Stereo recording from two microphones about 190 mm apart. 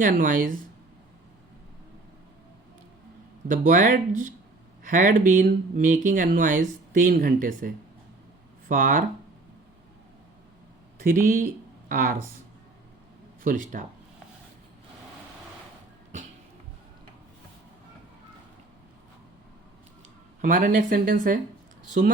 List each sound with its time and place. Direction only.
0.0 s speech: 45° right (ahead or behind)
3.5 s speech: 45° right (ahead or behind)
10.9 s a sound: 45° right (ahead or behind)
11.9 s speech: 45° right (ahead or behind)
13.4 s speech: 45° right (ahead or behind)
20.4 s speech: 45° right (ahead or behind)